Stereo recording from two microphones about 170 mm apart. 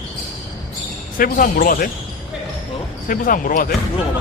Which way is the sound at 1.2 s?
55° left (ahead or behind).